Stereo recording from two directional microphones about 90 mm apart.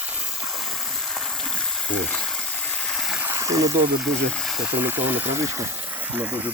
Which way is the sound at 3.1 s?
30° right (ahead or behind).